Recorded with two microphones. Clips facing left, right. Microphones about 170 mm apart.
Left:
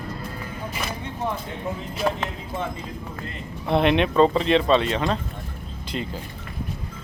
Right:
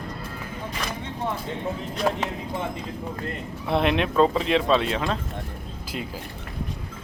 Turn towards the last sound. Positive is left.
turn(degrees=0)  # may be behind; listen again after turning